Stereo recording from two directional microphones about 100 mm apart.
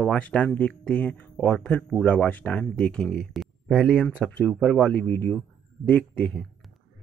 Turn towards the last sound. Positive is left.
turn(degrees=15)  # may be behind; listen again after turning